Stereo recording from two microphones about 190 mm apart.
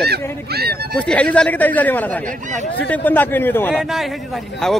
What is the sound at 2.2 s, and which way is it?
Speech, 40° right (ahead or behind).